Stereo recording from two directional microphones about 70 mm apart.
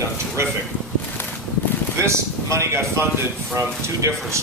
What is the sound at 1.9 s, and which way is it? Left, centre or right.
Speech, right.